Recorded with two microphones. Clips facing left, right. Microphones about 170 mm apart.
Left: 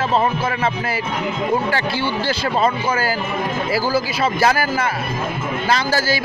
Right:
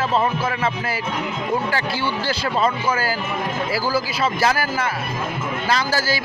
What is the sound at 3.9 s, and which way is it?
Speech, 60° left (ahead or behind).